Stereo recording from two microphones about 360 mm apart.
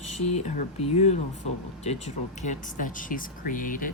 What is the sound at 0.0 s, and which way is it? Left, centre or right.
Speech, centre.